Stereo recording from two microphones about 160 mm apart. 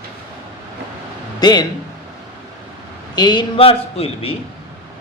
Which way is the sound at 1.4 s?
25° left (ahead or behind).